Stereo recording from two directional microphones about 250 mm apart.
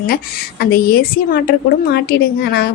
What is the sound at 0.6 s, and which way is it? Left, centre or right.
A woman's voice, left.